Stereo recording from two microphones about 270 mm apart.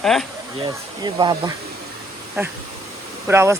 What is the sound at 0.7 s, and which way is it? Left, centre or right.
Speech, centre.